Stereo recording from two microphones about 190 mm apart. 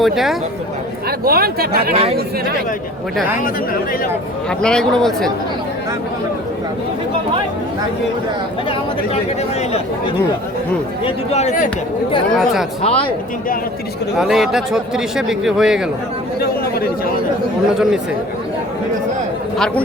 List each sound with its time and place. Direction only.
0.0 s speech: centre (ahead or behind)
1.2 s speech: 50° right (ahead or behind)
3.3 s speech: 45° left (ahead or behind)
4.6 s speech: 5° left (ahead or behind)
11.0 s a man's voice: 35° left (ahead or behind)
12.8 s a man's voice: 30° left (ahead or behind)
14.2 s speech: centre (ahead or behind)
16.4 s speech: 55° left (ahead or behind)
19.5 s speech: 5° left (ahead or behind)